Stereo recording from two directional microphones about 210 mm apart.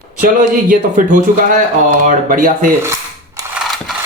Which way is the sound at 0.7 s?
40° right (ahead or behind).